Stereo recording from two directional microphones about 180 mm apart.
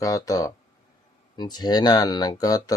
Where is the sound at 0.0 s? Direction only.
20° left (ahead or behind).